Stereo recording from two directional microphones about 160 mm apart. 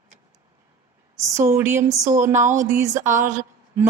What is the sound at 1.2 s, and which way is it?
Speech, 20° right (ahead or behind).